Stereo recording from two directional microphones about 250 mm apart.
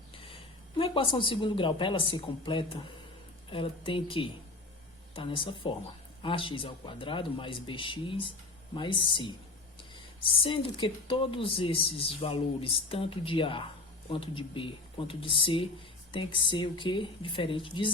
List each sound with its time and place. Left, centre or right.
0.2 s speech: left